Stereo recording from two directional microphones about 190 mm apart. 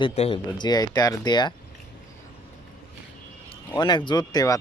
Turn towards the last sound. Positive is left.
turn(degrees=20)  # may be behind; listen again after turning